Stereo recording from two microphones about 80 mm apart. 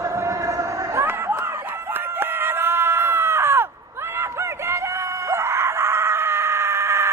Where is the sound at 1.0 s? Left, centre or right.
Right.